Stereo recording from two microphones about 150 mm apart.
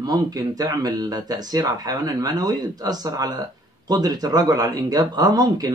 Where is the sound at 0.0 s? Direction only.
25° right (ahead or behind).